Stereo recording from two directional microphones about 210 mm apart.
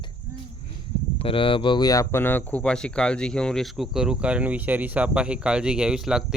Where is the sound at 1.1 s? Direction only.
25° left (ahead or behind).